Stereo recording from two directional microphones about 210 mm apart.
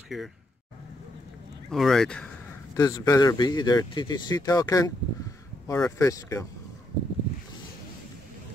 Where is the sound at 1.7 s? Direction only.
Centre (ahead or behind).